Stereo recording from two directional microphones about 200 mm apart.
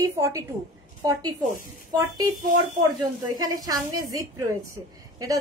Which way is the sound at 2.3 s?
40° right (ahead or behind).